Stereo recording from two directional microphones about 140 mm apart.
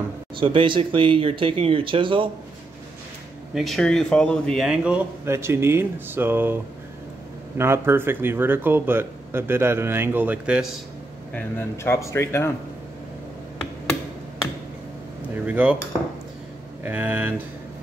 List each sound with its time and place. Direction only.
0.4 s speech: 35° right (ahead or behind)
3.5 s speech: centre (ahead or behind)
5.2 s speech: 20° right (ahead or behind)
11.3 s speech: 15° left (ahead or behind)
15.4 s speech: 10° right (ahead or behind)
16.8 s speech: 10° right (ahead or behind)